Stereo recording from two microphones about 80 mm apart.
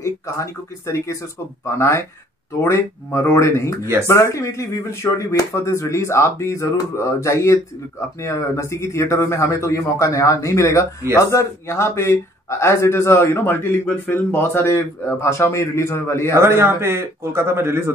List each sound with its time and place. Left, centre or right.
0.0 s speech: left
16.3 s a man's voice: right